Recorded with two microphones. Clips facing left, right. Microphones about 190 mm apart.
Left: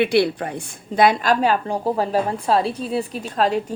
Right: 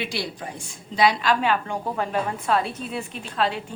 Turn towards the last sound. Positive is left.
turn(degrees=40)  # may be behind; listen again after turning